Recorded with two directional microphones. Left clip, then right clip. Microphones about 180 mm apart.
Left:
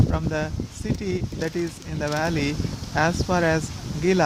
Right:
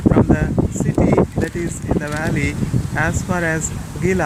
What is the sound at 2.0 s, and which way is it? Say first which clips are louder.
Speech: even; 20° left (ahead or behind).